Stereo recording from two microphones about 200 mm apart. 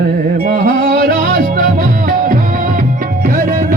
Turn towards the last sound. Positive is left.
turn(degrees=-45)  # may be behind; listen again after turning